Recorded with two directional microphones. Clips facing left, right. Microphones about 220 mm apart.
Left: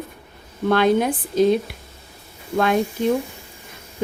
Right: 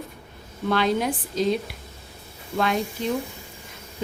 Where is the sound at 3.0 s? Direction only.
50° left (ahead or behind).